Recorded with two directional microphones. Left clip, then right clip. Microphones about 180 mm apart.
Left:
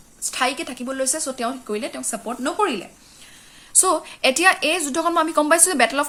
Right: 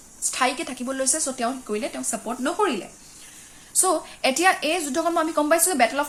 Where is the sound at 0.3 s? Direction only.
15° left (ahead or behind).